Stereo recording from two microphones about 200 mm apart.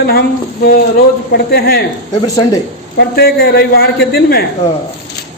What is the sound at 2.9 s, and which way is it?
Speech, 50° left (ahead or behind).